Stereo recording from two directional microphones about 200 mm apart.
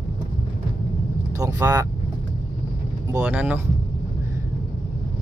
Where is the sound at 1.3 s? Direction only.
15° right (ahead or behind).